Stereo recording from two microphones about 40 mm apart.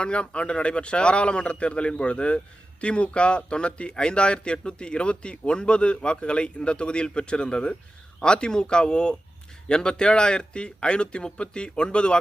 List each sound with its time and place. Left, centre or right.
0.0 s speech: left